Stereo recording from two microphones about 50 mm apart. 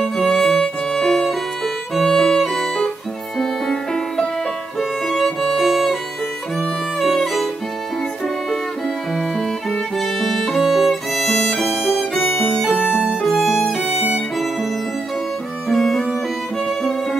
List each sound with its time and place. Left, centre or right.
0.0 s music: centre
4.7 s violin: centre
9.9 s music: centre
10.6 s violin: centre
12.2 s violin: left
12.9 s music: centre
13.2 s music: centre
15.7 s music: centre